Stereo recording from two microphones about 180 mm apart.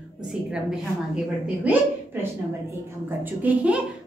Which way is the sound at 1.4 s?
10° right (ahead or behind).